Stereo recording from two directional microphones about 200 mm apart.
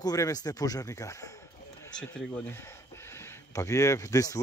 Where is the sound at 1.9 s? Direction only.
5° left (ahead or behind).